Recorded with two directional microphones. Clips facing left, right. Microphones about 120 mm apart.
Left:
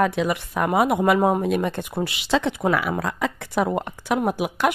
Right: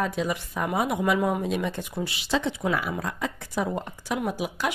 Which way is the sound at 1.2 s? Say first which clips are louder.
Left 5 dB; 50° left (ahead or behind).